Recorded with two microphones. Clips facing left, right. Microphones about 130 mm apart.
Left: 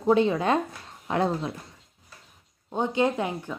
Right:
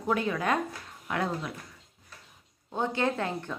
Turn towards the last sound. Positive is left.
turn(degrees=15)  # may be behind; listen again after turning